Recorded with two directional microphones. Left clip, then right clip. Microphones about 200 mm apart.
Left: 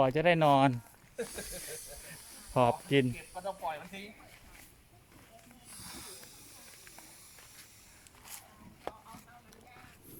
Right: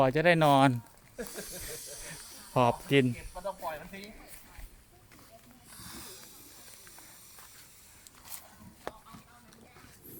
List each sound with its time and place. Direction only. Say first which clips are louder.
0.0 s speech: right 2 dB; 25° right (ahead or behind)
2.5 s speech: right 1 dB; 15° right (ahead or behind)
3.3 s snake: even; 30° left (ahead or behind)
5.8 s a sound: right 1 dB; 15° left (ahead or behind)